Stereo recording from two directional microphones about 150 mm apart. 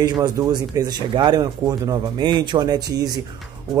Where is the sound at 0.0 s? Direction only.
25° right (ahead or behind).